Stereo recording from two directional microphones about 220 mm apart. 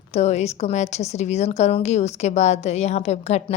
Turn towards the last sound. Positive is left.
turn(degrees=30)  # may be behind; listen again after turning